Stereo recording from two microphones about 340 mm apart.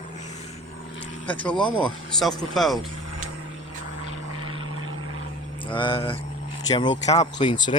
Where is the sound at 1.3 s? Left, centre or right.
Centre.